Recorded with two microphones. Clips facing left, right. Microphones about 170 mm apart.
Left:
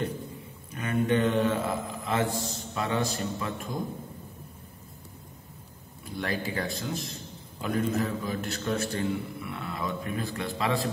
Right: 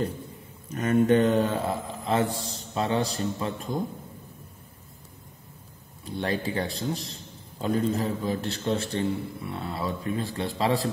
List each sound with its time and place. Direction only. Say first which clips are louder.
0.7 s a man's voice: right 6 dB; 40° right (ahead or behind)
6.0 s a man's voice: right 3 dB; 30° right (ahead or behind)